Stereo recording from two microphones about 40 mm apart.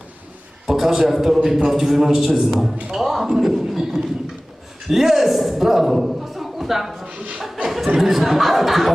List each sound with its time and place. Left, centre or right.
0.7 s a man's voice: centre
7.1 s chuckle: right
7.9 s speech: centre